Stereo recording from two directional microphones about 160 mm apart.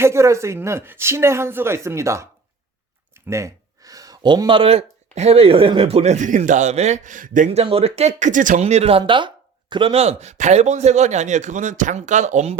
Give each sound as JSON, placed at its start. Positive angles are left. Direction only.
{"t": 0.0, "sound": "speech", "side_deg": -15}
{"t": 3.2, "sound": "speech", "side_deg": -20}
{"t": 7.6, "sound": "speech", "side_deg": -35}